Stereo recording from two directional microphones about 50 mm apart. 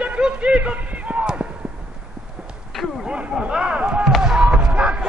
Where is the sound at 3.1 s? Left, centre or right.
Right.